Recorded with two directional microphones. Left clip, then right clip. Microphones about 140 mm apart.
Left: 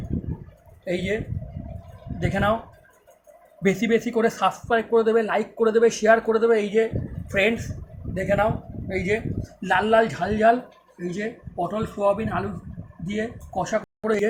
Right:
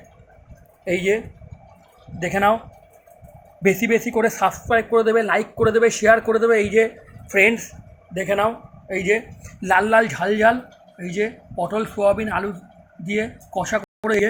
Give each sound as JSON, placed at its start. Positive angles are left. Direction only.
{"t": 0.9, "sound": "speech", "side_deg": -35}
{"t": 3.6, "sound": "speech", "side_deg": -20}